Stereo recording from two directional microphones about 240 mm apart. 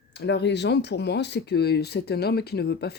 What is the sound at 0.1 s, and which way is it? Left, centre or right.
Speech, left.